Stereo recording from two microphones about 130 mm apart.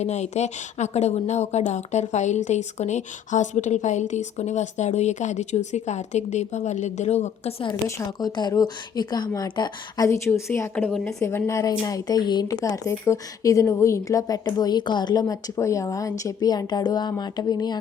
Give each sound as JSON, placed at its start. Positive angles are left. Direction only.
{"t": 0.0, "sound": "speech", "side_deg": 60}
{"t": 7.9, "sound": "speech", "side_deg": 20}
{"t": 10.1, "sound": "speech", "side_deg": 20}